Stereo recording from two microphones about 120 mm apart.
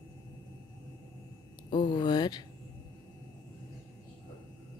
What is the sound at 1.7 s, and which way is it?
Speech, 40° left (ahead or behind).